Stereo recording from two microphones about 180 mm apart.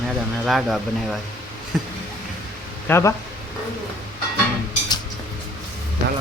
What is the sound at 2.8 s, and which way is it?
Speech, 15° left (ahead or behind).